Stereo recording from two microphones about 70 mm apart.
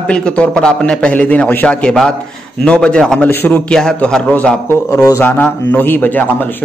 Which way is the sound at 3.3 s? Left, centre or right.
Left.